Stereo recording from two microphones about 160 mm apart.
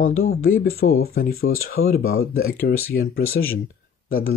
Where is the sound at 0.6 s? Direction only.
70° left (ahead or behind).